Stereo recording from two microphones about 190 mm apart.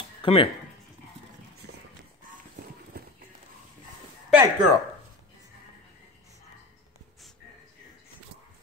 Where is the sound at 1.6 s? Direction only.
60° right (ahead or behind).